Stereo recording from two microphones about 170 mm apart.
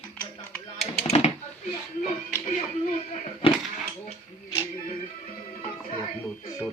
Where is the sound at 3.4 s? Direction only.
30° left (ahead or behind).